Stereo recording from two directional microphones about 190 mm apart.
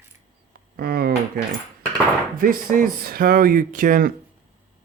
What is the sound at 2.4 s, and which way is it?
Speech, 50° right (ahead or behind).